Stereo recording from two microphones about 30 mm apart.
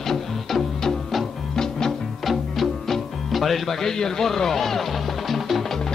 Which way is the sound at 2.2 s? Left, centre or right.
Centre.